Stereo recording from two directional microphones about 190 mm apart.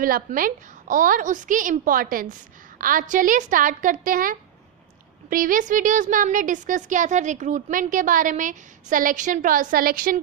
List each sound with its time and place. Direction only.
0.0 s speech: 45° right (ahead or behind)